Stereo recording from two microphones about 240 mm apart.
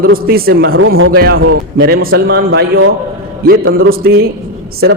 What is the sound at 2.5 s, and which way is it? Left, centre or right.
Speech, right.